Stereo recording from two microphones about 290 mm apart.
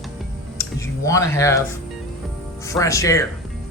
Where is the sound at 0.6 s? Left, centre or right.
Centre.